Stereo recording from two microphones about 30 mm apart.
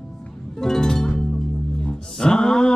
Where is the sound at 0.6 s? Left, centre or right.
Centre.